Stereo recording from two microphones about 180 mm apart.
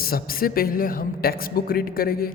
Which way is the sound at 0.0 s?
55° left (ahead or behind).